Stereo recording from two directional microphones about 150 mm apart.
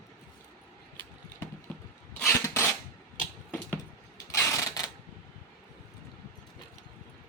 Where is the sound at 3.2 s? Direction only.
10° left (ahead or behind).